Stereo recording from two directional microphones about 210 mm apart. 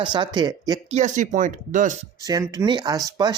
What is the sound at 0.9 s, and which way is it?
Speech, 35° right (ahead or behind).